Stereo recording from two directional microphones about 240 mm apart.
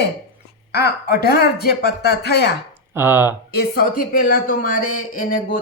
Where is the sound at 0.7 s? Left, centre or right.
Left.